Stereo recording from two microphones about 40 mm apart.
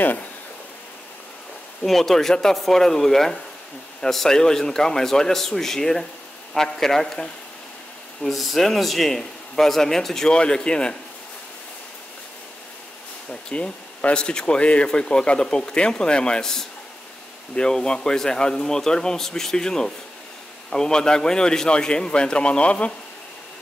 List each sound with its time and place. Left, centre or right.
1.9 s speech: centre
10.3 s speech: left
13.3 s speech: left